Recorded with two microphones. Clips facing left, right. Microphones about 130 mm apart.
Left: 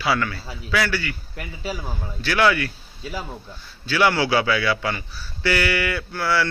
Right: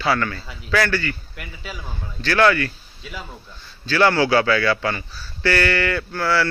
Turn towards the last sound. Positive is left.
turn(degrees=15)  # may be behind; listen again after turning